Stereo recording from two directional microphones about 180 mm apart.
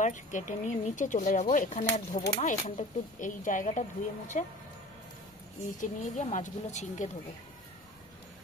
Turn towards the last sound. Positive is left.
turn(degrees=40)  # may be behind; listen again after turning